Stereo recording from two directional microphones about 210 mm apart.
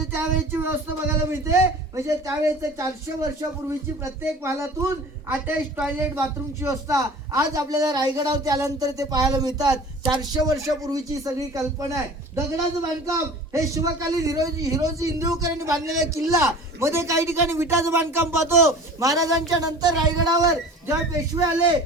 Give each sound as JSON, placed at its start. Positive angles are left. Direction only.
{"t": 0.1, "sound": "a man's voice", "side_deg": -10}
{"t": 13.5, "sound": "a man's voice", "side_deg": -15}